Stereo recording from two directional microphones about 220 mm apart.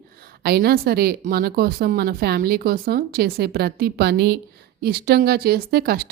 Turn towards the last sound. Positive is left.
turn(degrees=-45)  # may be behind; listen again after turning